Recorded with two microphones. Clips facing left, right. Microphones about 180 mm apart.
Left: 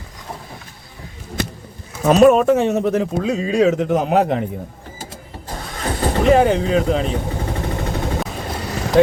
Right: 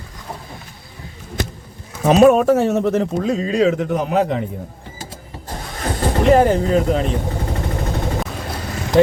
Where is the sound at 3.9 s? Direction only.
70° left (ahead or behind).